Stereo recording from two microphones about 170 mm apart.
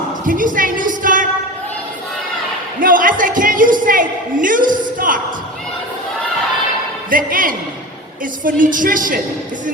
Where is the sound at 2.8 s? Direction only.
55° right (ahead or behind).